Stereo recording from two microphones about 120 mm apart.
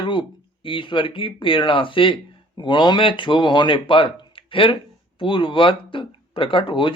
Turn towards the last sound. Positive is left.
turn(degrees=45)  # may be behind; listen again after turning